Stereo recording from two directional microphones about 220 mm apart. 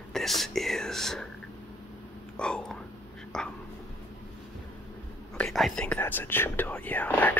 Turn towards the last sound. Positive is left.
turn(degrees=5)  # may be behind; listen again after turning